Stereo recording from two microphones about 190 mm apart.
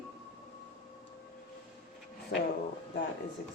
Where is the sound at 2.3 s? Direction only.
60° left (ahead or behind).